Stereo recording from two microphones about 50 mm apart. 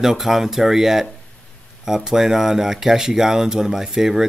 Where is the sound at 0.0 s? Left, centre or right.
Centre.